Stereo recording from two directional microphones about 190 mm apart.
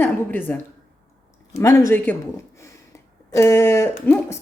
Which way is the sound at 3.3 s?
15° left (ahead or behind).